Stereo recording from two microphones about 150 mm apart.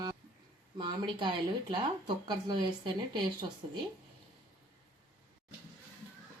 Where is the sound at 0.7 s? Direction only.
30° right (ahead or behind).